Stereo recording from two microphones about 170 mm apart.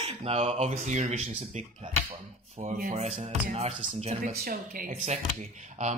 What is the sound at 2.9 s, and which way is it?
Music, 40° right (ahead or behind).